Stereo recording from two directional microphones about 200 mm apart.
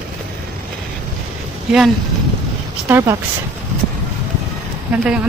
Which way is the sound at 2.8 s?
10° right (ahead or behind).